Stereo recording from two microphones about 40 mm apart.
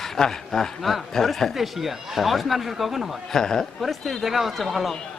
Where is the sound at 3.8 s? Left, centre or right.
Centre.